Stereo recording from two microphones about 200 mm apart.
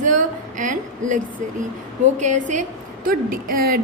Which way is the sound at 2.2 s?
35° right (ahead or behind).